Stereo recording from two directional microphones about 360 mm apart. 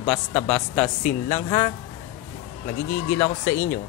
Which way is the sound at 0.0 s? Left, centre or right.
Centre.